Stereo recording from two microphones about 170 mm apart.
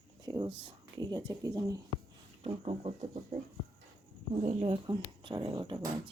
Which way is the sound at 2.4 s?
35° right (ahead or behind).